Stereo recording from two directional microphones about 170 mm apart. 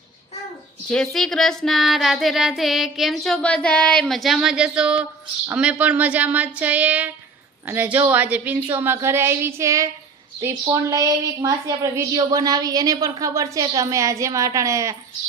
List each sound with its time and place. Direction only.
0.9 s a woman's voice: 5° left (ahead or behind); by 14.9 s 20° right (ahead or behind)